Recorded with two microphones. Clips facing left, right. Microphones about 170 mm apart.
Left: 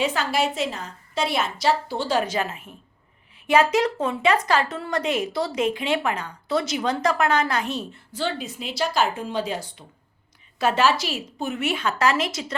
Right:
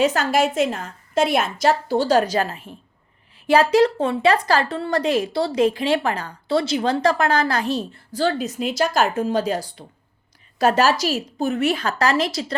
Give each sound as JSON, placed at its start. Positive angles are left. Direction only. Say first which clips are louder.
{"t": 0.0, "sound": "a woman's voice", "louder": "right 5 dB", "side_deg": -45}